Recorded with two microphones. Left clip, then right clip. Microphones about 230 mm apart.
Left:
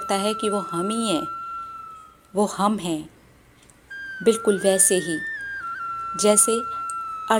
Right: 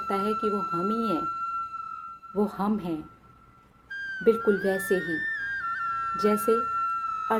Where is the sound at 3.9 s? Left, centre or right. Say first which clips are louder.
Even; centre.